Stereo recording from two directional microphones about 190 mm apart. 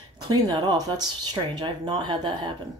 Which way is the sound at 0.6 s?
20° right (ahead or behind).